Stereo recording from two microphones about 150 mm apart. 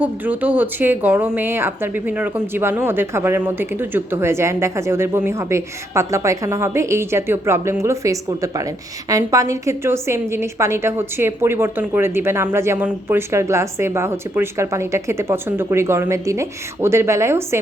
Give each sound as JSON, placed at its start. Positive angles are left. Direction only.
{"t": 0.0, "sound": "speech", "side_deg": -10}